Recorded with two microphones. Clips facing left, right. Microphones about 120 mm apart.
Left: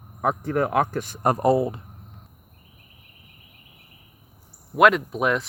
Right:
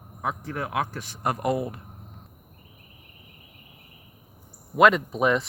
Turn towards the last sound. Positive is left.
turn(degrees=0)  # may be behind; listen again after turning